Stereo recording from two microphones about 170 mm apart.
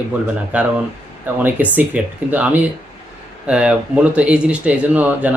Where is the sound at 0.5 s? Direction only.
5° right (ahead or behind).